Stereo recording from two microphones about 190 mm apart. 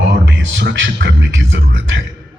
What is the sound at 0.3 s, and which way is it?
A man's voice, 70° right (ahead or behind).